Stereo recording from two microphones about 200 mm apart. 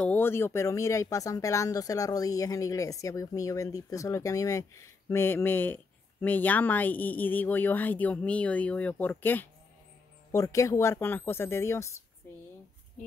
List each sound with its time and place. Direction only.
0.0 s speech: 10° left (ahead or behind)